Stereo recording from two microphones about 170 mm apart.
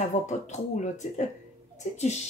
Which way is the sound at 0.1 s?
45° left (ahead or behind).